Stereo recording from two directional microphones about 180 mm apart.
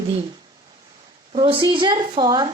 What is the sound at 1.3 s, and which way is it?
Speech, 30° right (ahead or behind).